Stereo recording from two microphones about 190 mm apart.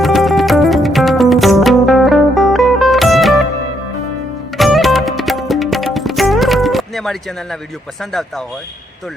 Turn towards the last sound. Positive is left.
turn(degrees=0)  # may be behind; listen again after turning